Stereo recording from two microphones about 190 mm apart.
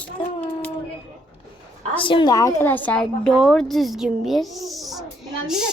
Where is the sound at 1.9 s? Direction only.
25° left (ahead or behind); by 5.7 s 5° right (ahead or behind).